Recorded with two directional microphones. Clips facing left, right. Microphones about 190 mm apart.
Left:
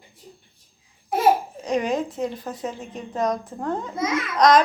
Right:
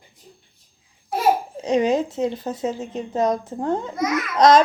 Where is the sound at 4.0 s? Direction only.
25° left (ahead or behind).